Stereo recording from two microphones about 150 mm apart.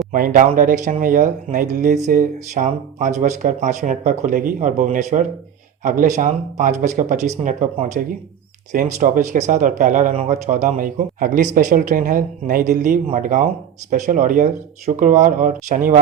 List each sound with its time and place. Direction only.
0.1 s speech: 65° right (ahead or behind)